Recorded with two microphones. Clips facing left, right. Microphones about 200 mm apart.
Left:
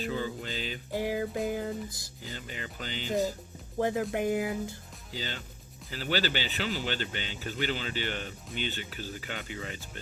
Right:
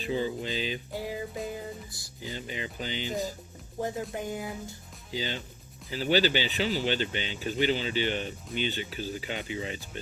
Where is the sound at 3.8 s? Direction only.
85° left.